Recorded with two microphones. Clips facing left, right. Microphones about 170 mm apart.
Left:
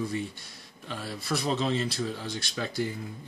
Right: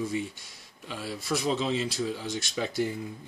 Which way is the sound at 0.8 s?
10° right (ahead or behind).